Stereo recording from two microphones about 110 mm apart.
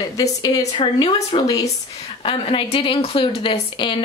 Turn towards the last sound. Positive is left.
turn(degrees=50)  # may be behind; listen again after turning